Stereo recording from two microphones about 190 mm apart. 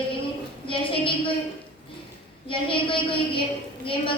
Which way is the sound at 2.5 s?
25° left (ahead or behind).